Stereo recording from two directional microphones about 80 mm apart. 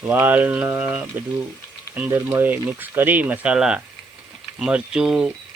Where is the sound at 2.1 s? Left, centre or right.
Right; by 5.3 s centre.